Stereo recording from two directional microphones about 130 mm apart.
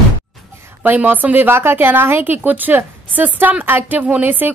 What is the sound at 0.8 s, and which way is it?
A woman's voice, 15° right (ahead or behind).